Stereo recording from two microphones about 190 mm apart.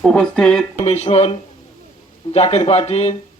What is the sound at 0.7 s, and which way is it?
Speech, 35° left (ahead or behind).